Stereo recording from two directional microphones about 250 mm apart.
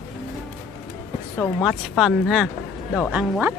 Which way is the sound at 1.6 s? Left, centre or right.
Centre.